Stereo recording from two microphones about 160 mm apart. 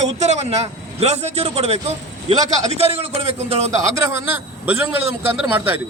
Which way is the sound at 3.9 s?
15° right (ahead or behind).